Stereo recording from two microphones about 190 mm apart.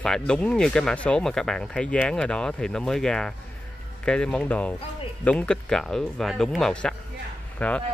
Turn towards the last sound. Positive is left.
turn(degrees=5)  # may be behind; listen again after turning